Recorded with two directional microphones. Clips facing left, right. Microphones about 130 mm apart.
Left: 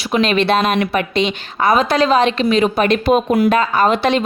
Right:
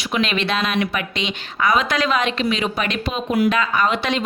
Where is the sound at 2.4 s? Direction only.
45° left (ahead or behind).